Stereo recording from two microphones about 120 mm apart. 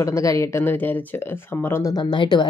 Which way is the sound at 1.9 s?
40° left (ahead or behind).